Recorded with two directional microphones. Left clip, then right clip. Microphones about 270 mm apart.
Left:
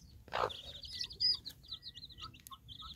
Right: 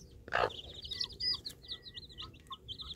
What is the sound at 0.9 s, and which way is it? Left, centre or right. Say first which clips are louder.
Bird: right 5 dB; centre.